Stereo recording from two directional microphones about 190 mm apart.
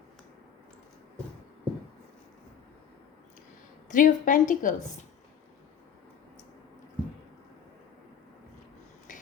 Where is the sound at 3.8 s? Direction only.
45° left (ahead or behind).